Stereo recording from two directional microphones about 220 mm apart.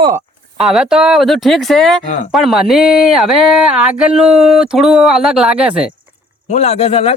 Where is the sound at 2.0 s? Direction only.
35° left (ahead or behind).